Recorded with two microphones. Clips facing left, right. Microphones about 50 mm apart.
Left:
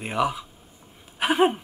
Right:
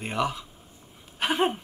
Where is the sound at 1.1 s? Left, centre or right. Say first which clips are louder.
Left 4 dB; centre.